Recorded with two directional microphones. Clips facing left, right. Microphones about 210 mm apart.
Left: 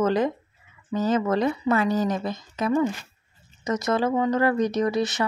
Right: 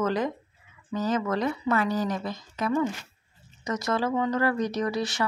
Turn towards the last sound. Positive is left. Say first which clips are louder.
# left 4 dB
turn(degrees=20)  # may be behind; listen again after turning